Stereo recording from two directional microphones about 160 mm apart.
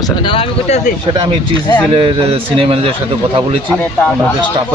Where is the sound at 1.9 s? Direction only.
35° right (ahead or behind).